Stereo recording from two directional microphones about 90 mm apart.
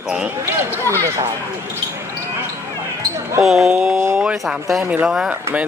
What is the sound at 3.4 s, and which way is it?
Speech, 5° right (ahead or behind).